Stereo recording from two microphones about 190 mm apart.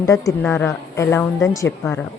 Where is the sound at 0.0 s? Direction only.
15° left (ahead or behind).